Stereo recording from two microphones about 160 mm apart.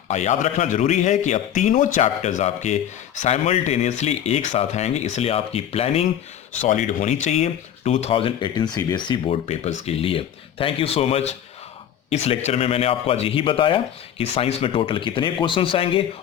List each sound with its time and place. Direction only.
0.1 s a man's voice: 45° left (ahead or behind)
6.6 s speech: 50° left (ahead or behind); by 16.0 s 35° left (ahead or behind)